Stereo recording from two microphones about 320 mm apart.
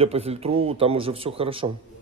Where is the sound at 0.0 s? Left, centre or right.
Centre.